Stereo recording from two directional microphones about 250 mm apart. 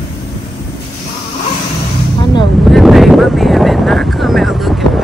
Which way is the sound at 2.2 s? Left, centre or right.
Centre.